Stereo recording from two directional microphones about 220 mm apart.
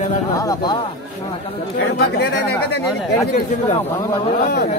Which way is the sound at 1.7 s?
50° left (ahead or behind).